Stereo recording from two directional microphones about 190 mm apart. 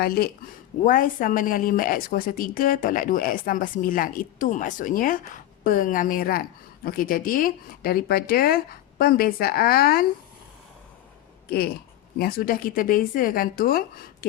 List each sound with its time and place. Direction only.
0.0 s a woman's voice: 55° left (ahead or behind)
11.4 s a woman's voice: 55° left (ahead or behind)